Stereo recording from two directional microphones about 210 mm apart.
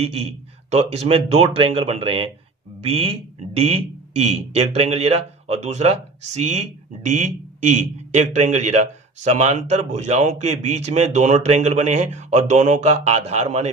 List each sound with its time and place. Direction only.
0.0 s speech: 30° right (ahead or behind)